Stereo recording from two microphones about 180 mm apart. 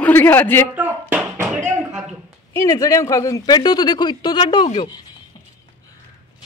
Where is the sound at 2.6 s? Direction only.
20° left (ahead or behind).